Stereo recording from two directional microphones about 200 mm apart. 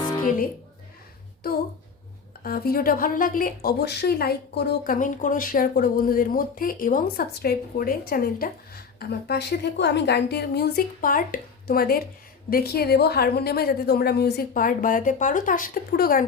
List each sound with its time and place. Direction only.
2.4 s speech: 50° left (ahead or behind)